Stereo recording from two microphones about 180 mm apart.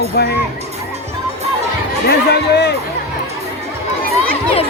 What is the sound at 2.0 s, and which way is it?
Speech, 65° left (ahead or behind).